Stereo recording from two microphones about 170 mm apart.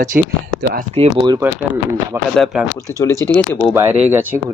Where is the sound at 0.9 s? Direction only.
35° right (ahead or behind).